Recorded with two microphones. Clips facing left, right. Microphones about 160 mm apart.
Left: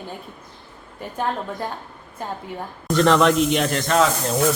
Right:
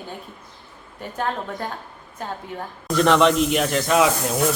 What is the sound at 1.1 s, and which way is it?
Speech, 5° left (ahead or behind).